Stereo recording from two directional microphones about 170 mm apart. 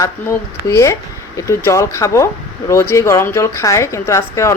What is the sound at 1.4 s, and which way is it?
Speech, 15° left (ahead or behind).